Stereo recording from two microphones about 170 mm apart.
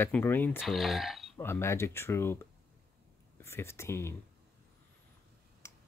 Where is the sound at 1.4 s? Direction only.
15° left (ahead or behind).